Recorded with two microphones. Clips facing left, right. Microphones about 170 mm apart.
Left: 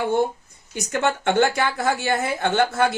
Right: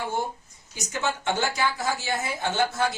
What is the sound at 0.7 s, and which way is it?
A woman's voice, 60° left (ahead or behind).